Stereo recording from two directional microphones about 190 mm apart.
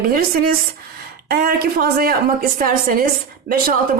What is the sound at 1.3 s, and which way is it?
A woman's voice, 50° right (ahead or behind).